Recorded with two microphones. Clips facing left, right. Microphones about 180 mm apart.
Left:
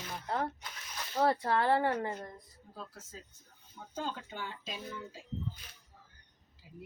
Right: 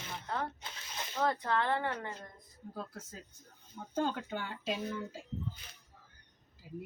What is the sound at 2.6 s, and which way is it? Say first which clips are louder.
Speech: right 9 dB; 55° right (ahead or behind).